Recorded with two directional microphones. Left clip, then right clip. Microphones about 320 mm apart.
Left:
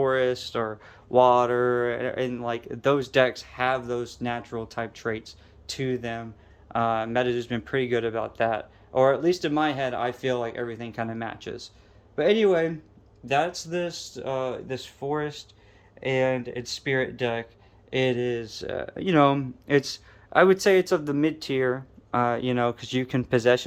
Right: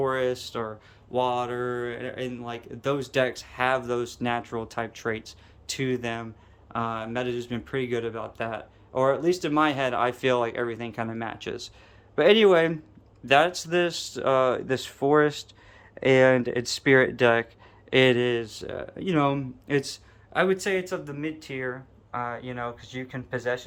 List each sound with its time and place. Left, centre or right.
0.0 s speech: centre; by 23.6 s left